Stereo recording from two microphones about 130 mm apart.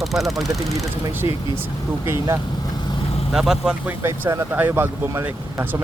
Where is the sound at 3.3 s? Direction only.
5° right (ahead or behind).